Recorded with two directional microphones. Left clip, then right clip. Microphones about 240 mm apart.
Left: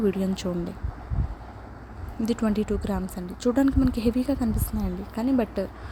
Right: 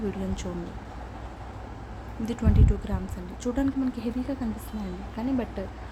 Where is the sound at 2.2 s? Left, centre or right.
Left.